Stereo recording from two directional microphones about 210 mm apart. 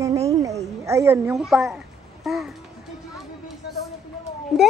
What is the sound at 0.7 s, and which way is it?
A woman's voice, 15° right (ahead or behind).